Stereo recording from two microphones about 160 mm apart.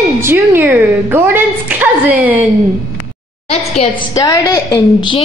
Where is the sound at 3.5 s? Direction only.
40° left (ahead or behind).